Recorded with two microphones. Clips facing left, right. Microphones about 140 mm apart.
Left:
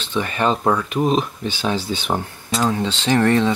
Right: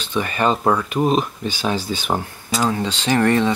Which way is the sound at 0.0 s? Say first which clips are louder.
Right 1 dB; 10° right (ahead or behind).